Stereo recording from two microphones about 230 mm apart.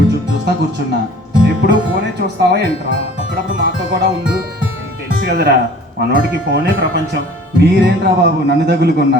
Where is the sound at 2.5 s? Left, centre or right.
Right.